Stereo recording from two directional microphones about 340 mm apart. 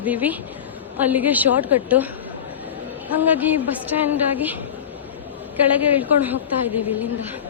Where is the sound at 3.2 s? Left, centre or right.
Centre.